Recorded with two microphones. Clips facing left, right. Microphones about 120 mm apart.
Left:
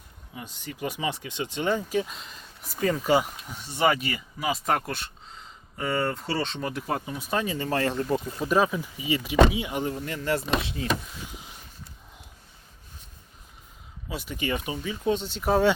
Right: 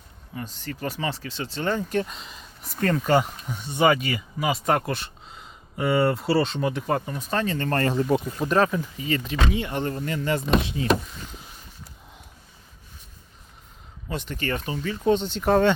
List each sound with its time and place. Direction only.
0.3 s speech: 15° left (ahead or behind)
1.9 s speech: 5° left (ahead or behind)
8.5 s speech: 10° left (ahead or behind)
14.1 s speech: 10° left (ahead or behind)